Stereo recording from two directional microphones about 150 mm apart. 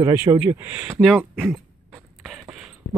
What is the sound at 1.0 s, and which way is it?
Speech, centre (ahead or behind).